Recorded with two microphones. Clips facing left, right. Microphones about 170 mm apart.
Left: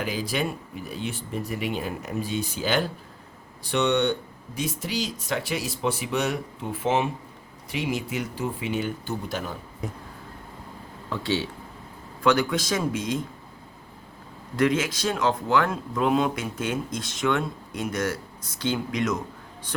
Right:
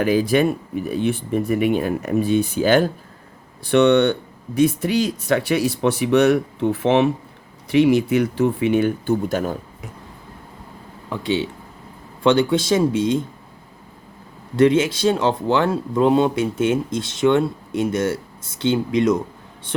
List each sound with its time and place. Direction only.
0.0 s speech: 50° right (ahead or behind)
3.6 s speech: 65° right (ahead or behind)
11.1 s speech: 20° right (ahead or behind)
14.5 s speech: 30° right (ahead or behind)